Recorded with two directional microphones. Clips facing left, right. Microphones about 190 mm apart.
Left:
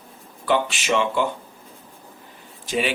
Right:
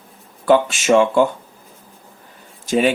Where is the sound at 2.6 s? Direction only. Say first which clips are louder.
Right 8 dB; 45° right (ahead or behind).